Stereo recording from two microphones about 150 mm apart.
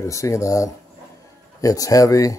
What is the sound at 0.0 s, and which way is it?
Speech, 20° left (ahead or behind).